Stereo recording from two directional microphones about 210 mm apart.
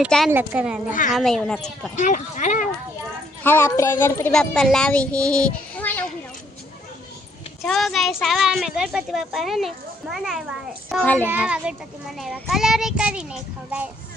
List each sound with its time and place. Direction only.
0.0 s a child's voice: centre (ahead or behind)
2.0 s speech: 35° left (ahead or behind)
3.4 s a woman's voice: 10° left (ahead or behind)
7.6 s a child's voice: centre (ahead or behind)
11.3 s a child's voice: 5° right (ahead or behind)